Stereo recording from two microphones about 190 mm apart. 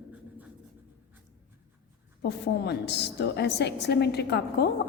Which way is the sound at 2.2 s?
65° left (ahead or behind).